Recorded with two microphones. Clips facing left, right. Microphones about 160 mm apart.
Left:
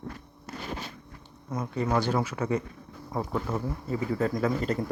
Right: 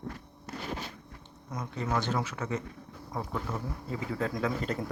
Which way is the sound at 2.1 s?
10° left (ahead or behind).